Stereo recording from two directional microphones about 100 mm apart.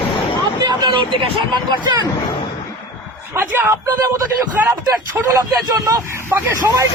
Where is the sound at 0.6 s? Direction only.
50° right (ahead or behind).